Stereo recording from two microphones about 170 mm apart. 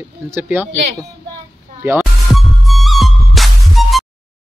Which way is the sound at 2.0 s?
Centre (ahead or behind).